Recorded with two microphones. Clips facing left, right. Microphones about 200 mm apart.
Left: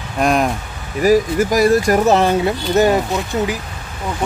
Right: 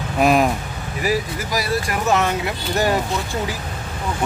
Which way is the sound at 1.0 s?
45° left (ahead or behind).